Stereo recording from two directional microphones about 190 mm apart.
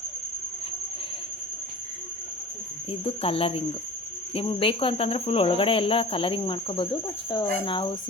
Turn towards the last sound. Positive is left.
turn(degrees=25)  # may be behind; listen again after turning